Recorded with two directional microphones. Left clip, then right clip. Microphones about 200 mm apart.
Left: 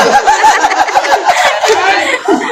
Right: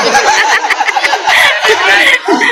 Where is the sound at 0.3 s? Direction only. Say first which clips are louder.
Left 2 dB; 5° left (ahead or behind).